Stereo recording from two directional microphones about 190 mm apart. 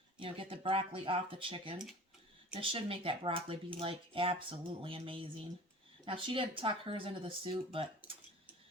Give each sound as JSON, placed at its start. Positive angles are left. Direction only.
{"t": 0.2, "sound": "speech", "side_deg": -30}